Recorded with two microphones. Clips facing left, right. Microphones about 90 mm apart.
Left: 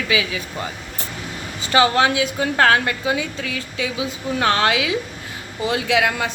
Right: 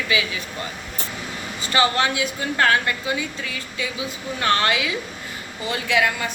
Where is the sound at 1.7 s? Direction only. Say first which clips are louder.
Left 4 dB; 90° left.